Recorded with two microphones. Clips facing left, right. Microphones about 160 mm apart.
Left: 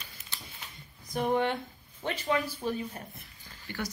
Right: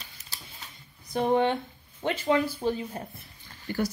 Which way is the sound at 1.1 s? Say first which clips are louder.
Right 4 dB; 30° right (ahead or behind).